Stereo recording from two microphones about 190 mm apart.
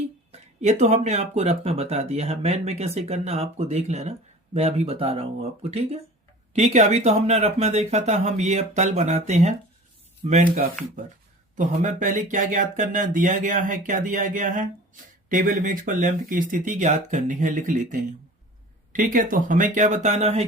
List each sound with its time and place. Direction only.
0.3 s speech: 35° right (ahead or behind)
6.5 s speech: 35° right (ahead or behind)